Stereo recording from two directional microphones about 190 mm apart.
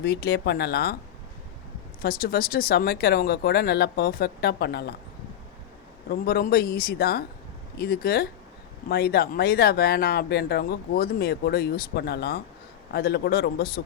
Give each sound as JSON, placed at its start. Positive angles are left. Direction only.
{"t": 0.0, "sound": "speech", "side_deg": 55}
{"t": 2.0, "sound": "speech", "side_deg": 50}
{"t": 6.1, "sound": "speech", "side_deg": 50}